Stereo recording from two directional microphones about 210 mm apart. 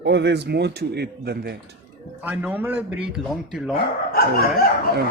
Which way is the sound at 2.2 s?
10° right (ahead or behind).